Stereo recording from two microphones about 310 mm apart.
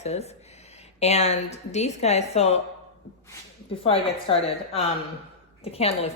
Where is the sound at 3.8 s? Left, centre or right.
Centre.